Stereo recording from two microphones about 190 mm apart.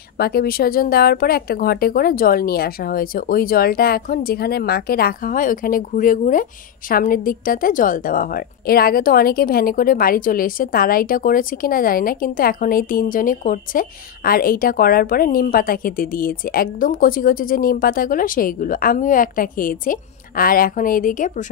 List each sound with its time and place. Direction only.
0.2 s a woman's voice: 55° left (ahead or behind)